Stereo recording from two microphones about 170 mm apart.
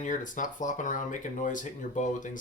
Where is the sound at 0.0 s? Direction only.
50° left (ahead or behind).